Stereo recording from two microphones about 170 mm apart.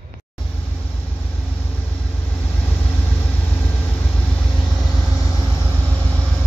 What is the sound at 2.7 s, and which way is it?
Vehicle, 10° left (ahead or behind).